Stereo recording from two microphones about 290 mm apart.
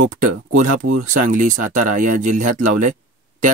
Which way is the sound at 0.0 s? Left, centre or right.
Right.